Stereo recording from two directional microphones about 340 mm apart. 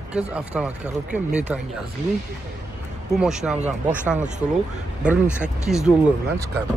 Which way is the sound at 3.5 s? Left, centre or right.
Centre.